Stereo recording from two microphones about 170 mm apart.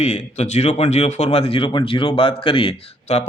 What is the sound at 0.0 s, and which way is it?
Speech, 40° left (ahead or behind).